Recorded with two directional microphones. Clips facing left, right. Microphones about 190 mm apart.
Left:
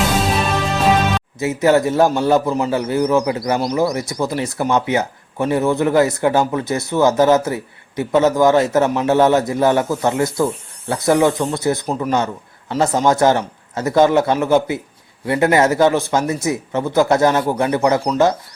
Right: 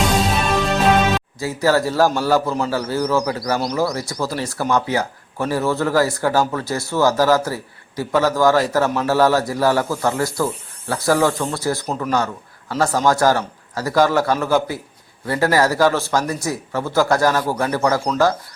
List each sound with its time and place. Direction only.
0.0 s music: centre (ahead or behind)
1.4 s speech: 20° left (ahead or behind)
11.9 s a man's voice: 10° left (ahead or behind)
12.1 s a man's voice: 20° left (ahead or behind)